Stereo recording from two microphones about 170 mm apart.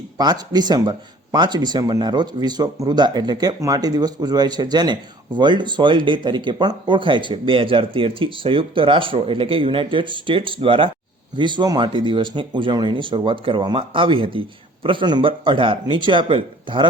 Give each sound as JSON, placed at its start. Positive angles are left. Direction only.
{"t": 0.2, "sound": "speech", "side_deg": -25}